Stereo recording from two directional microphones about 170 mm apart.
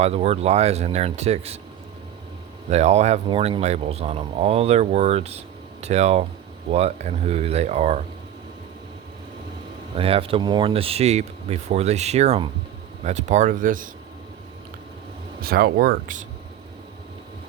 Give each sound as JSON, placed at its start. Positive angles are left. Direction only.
{"t": 0.0, "sound": "speech", "side_deg": -40}
{"t": 2.6, "sound": "speech", "side_deg": -40}
{"t": 3.2, "sound": "speech", "side_deg": -30}
{"t": 9.9, "sound": "speech", "side_deg": -35}
{"t": 15.4, "sound": "speech", "side_deg": -65}